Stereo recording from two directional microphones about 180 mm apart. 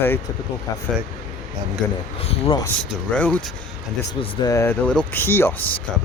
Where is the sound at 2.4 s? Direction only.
25° left (ahead or behind).